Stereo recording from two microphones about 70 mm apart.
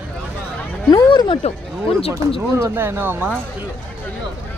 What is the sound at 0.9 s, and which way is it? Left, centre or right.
Speech, left.